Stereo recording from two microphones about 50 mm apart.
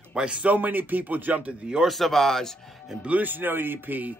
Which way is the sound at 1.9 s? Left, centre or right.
Centre.